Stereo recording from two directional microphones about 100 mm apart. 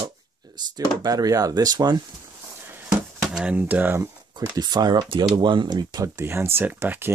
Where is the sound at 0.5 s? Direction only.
40° right (ahead or behind).